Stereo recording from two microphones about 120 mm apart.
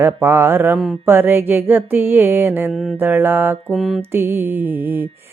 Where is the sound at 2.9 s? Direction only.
15° right (ahead or behind).